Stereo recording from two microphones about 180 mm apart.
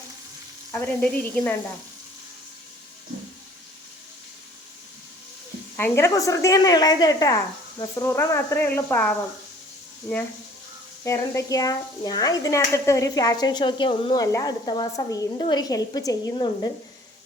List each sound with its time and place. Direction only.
0.7 s speech: 10° left (ahead or behind)
5.7 s speech: 15° left (ahead or behind)
11.0 s speech: 15° left (ahead or behind)